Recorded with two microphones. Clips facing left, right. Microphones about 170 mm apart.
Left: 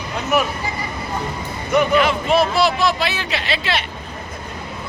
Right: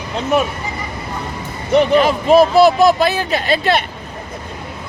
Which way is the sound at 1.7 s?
30° right (ahead or behind).